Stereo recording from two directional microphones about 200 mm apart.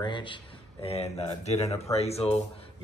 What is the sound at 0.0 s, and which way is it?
Speech, 25° left (ahead or behind).